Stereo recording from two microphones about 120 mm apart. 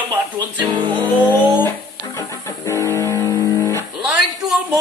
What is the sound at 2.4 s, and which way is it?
Music, 25° left (ahead or behind).